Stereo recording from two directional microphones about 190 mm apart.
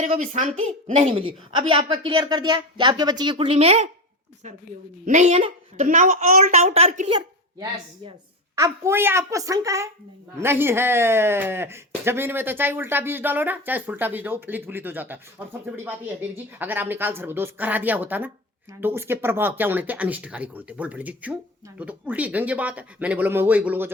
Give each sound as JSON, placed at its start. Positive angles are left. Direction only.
{"t": 0.0, "sound": "a woman's voice", "side_deg": -40}
{"t": 5.0, "sound": "a woman's voice", "side_deg": -40}
{"t": 7.1, "sound": "a woman's voice", "side_deg": -25}